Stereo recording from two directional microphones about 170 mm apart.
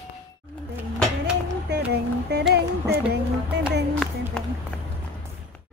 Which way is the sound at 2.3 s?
75° right (ahead or behind).